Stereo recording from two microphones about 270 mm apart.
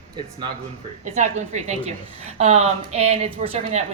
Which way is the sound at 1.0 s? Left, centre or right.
Right.